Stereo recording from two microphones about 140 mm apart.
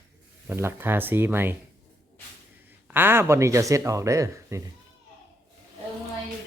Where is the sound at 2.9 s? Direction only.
15° right (ahead or behind).